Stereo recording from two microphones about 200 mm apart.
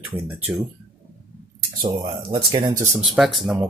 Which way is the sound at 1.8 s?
25° right (ahead or behind).